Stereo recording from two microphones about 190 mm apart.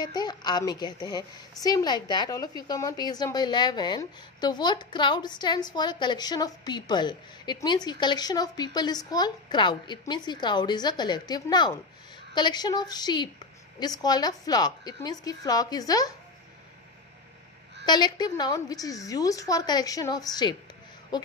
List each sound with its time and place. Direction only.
0.0 s a woman's voice: 20° left (ahead or behind)
17.8 s a woman's voice: 20° left (ahead or behind)